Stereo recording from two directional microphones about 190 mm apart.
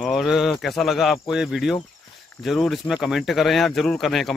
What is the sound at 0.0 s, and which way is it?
Speech, centre (ahead or behind).